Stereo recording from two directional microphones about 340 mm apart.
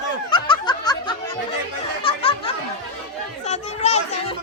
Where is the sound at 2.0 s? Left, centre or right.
Centre.